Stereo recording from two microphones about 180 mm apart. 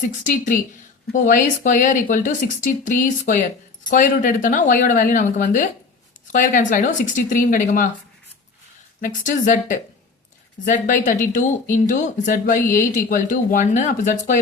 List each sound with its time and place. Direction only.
0.3 s speech: 45° left (ahead or behind)
9.0 s speech: 45° left (ahead or behind)